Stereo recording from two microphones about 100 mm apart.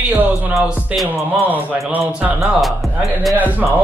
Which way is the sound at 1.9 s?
10° right (ahead or behind).